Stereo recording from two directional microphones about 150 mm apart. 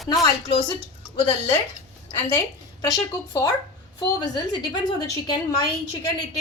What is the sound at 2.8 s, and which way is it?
A woman's voice, 25° left (ahead or behind).